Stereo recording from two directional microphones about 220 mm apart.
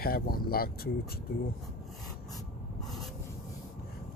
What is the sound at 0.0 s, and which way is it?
Speech, 45° left (ahead or behind).